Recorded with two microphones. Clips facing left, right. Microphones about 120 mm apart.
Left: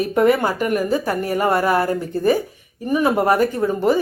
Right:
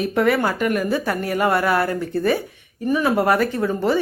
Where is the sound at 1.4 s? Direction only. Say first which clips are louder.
Left 1 dB; 25° left (ahead or behind).